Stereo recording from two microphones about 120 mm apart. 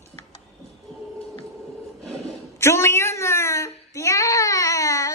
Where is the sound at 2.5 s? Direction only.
25° left (ahead or behind).